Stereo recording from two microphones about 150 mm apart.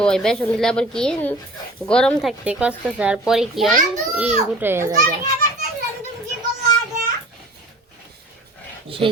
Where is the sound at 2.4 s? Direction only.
10° right (ahead or behind).